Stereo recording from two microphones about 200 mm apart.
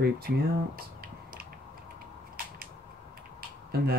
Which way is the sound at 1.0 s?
45° right (ahead or behind).